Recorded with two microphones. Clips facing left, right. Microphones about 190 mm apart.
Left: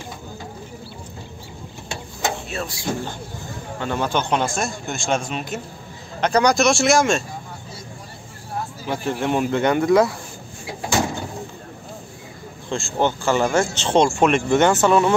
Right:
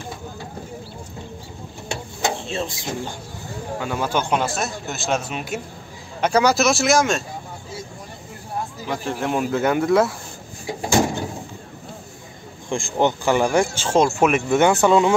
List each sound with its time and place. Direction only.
2.4 s speech: 25° right (ahead or behind)
3.8 s a man's voice: 5° right (ahead or behind)
8.8 s a man's voice: centre (ahead or behind)
12.6 s speech: 15° right (ahead or behind)